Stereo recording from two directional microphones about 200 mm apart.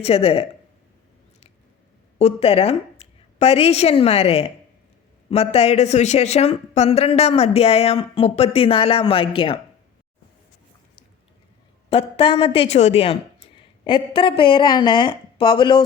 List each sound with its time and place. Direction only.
0.0 s speech: 30° left (ahead or behind)
2.1 s a woman's voice: 30° left (ahead or behind)
11.9 s a woman's voice: 30° left (ahead or behind)